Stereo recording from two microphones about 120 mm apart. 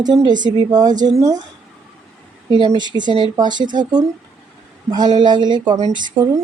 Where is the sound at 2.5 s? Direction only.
40° right (ahead or behind).